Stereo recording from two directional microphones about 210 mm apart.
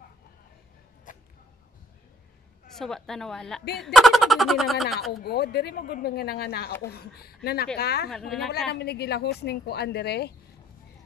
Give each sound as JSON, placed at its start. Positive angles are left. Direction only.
{"t": 1.1, "sound": "a sound", "side_deg": 40}
{"t": 2.7, "sound": "speech", "side_deg": 0}
{"t": 5.2, "sound": "speech", "side_deg": 50}
{"t": 8.1, "sound": "speech", "side_deg": 0}
{"t": 8.7, "sound": "speech", "side_deg": 50}